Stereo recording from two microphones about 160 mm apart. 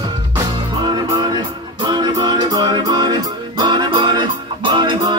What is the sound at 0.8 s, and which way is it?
Music, 25° right (ahead or behind).